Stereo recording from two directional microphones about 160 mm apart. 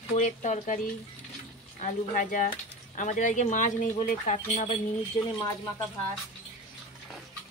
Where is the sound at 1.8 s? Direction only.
55° left (ahead or behind).